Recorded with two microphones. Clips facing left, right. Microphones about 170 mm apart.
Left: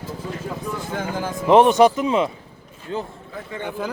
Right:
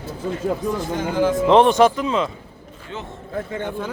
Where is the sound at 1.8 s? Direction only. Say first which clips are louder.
Left 1 dB; 15° left (ahead or behind).